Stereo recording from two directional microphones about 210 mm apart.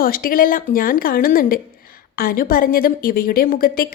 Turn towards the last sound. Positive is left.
turn(degrees=45)  # may be behind; listen again after turning